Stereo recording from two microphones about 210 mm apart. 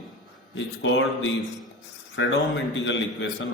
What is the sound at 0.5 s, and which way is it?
A man's voice, 60° left (ahead or behind).